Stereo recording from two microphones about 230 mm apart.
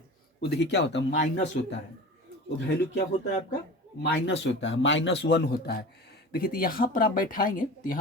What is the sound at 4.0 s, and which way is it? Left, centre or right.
Speech, left.